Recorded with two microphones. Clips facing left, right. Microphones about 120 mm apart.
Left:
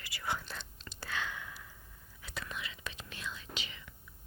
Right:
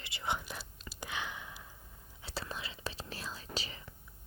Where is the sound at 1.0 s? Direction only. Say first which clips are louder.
Left 1 dB; 15° right (ahead or behind).